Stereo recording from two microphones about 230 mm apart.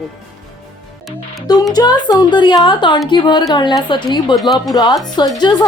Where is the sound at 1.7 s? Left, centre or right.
Centre.